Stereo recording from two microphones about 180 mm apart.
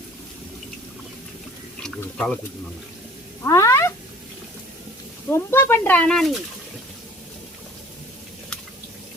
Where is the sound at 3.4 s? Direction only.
15° left (ahead or behind).